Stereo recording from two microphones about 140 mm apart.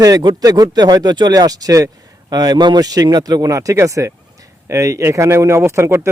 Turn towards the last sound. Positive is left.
turn(degrees=-20)  # may be behind; listen again after turning